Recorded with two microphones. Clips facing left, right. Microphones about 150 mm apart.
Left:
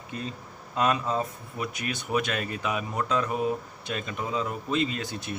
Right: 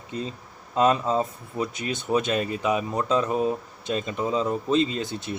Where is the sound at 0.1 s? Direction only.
20° right (ahead or behind).